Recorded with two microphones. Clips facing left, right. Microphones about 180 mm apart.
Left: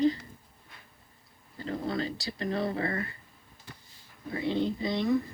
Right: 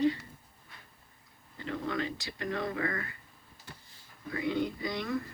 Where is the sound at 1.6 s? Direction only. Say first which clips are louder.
Left 2 dB; 35° left (ahead or behind).